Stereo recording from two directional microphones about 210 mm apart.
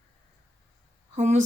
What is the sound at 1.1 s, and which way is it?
Speech, 35° right (ahead or behind).